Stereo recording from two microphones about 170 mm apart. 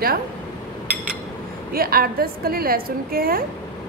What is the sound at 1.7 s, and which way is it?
A woman's voice, 60° right (ahead or behind).